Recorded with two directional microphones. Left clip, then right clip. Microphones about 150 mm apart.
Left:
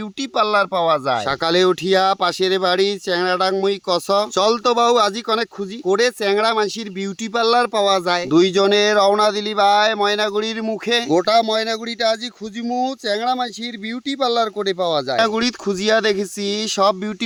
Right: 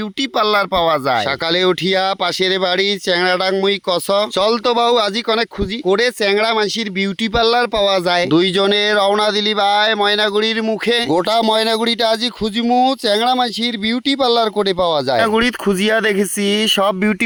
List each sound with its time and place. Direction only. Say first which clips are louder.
0.3 s speech: right 2 dB; 25° right (ahead or behind)
11.1 s speech: left 1 dB; 45° right (ahead or behind)